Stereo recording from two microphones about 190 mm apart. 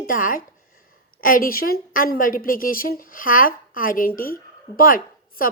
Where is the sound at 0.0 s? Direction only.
45° left (ahead or behind).